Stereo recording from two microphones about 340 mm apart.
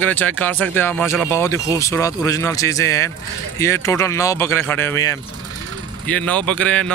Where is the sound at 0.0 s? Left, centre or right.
Centre.